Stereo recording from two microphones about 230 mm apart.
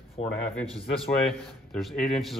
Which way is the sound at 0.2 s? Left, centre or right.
Left.